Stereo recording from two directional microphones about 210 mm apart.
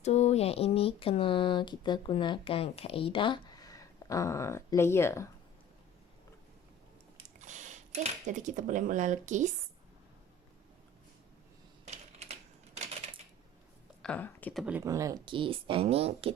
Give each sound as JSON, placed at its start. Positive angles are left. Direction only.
{"t": 0.0, "sound": "speech", "side_deg": 30}
{"t": 7.3, "sound": "speech", "side_deg": -35}
{"t": 12.2, "sound": "typewriter", "side_deg": -30}
{"t": 14.0, "sound": "speech", "side_deg": 5}
{"t": 14.6, "sound": "speech", "side_deg": -10}